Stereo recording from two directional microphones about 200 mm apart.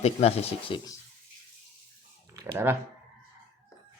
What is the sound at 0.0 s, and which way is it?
Speech, 30° left (ahead or behind).